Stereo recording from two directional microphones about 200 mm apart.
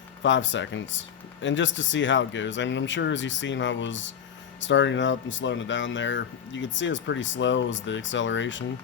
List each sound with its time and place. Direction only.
0.2 s speech: 65° left (ahead or behind)